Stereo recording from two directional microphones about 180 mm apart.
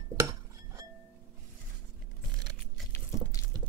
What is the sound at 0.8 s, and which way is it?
Chink, 20° right (ahead or behind).